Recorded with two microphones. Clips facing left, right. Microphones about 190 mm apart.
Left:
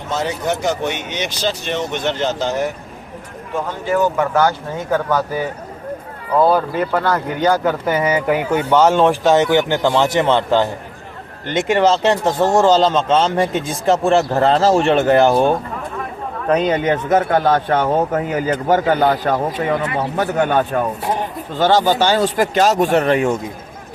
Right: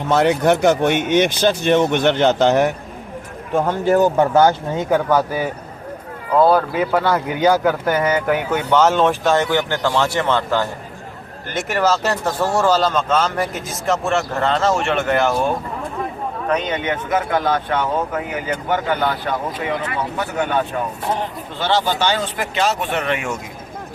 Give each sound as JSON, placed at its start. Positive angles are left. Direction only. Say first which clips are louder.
{"t": 0.1, "sound": "speech", "louder": "right 6 dB", "side_deg": -60}
{"t": 3.5, "sound": "speech", "louder": "right 4 dB", "side_deg": -50}
{"t": 4.2, "sound": "speech", "louder": "right 3 dB", "side_deg": -25}
{"t": 6.5, "sound": "speech", "louder": "even", "side_deg": -5}